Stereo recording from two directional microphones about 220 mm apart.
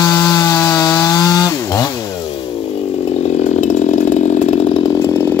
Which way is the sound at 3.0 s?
30° left (ahead or behind).